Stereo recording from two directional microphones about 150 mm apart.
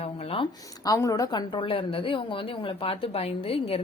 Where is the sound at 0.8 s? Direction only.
25° left (ahead or behind); by 3.8 s 40° left (ahead or behind).